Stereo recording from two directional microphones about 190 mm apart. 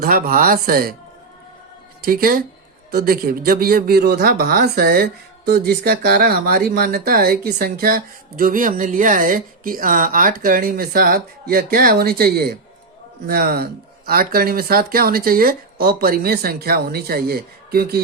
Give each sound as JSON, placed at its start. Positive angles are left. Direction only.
{"t": 0.0, "sound": "speech", "side_deg": -50}
{"t": 2.0, "sound": "speech", "side_deg": -50}